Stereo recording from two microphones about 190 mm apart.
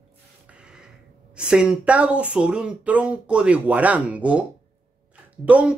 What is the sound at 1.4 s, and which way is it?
Speech, 5° right (ahead or behind).